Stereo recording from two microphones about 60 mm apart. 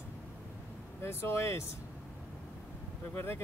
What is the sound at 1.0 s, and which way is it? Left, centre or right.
Speech, left.